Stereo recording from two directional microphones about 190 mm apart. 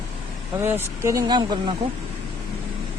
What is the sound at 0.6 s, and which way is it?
Speech, 10° right (ahead or behind).